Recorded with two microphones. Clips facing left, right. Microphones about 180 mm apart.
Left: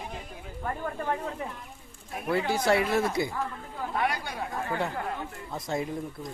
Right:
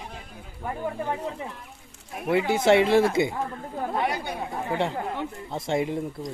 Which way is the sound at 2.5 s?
25° right (ahead or behind).